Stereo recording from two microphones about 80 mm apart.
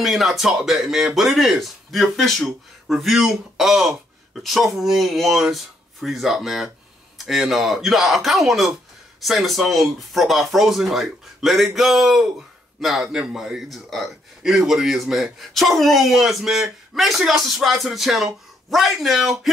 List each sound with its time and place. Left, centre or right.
0.0 s speech: centre